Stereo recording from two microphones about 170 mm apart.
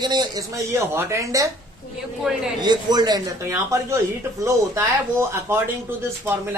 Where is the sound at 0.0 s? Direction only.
25° right (ahead or behind).